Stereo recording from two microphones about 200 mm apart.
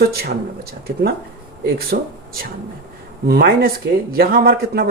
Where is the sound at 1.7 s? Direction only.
50° right (ahead or behind).